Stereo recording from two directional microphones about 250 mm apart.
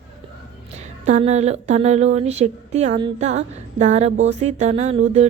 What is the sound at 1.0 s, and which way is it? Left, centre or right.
Speech, right.